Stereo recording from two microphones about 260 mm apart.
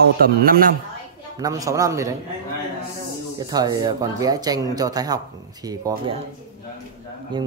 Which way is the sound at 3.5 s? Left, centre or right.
Centre.